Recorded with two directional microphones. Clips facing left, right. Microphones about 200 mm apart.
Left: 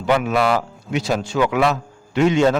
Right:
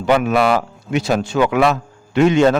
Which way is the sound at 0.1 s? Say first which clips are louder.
Right 3 dB; 60° right (ahead or behind).